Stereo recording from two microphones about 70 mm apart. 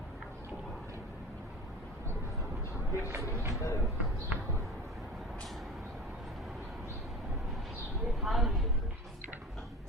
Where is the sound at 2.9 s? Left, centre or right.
Right.